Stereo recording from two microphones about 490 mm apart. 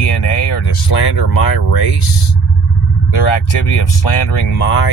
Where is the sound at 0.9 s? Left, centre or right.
Left.